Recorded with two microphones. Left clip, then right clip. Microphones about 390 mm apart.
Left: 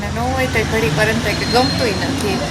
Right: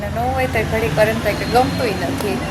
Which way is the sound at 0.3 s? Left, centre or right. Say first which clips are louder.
Left 3 dB; right.